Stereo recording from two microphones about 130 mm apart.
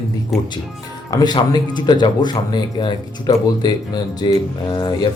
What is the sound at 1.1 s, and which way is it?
Speech, 30° left (ahead or behind).